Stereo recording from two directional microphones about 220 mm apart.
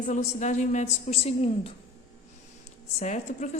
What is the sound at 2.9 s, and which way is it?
Speech, 35° left (ahead or behind).